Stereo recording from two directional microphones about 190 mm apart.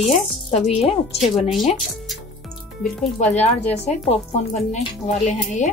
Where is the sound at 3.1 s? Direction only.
35° left (ahead or behind).